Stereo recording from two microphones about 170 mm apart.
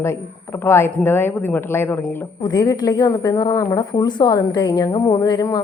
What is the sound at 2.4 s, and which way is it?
A woman's voice, 25° left (ahead or behind).